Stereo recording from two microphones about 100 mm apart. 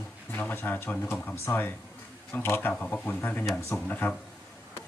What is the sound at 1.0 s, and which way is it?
Speech, 20° left (ahead or behind).